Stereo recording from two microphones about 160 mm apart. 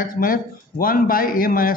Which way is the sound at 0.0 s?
65° left (ahead or behind).